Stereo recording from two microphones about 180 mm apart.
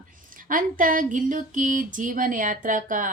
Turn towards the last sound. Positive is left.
turn(degrees=-45)  # may be behind; listen again after turning